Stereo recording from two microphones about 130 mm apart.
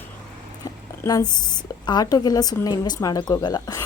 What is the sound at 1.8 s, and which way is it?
A woman's voice, 30° left (ahead or behind).